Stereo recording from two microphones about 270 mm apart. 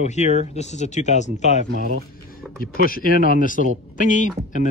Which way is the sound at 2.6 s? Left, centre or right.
Left.